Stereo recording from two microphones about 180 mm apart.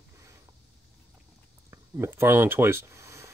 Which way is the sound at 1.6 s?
15° right (ahead or behind).